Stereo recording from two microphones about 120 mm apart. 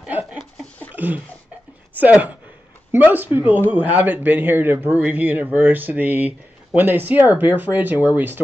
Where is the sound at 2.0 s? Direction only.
15° right (ahead or behind).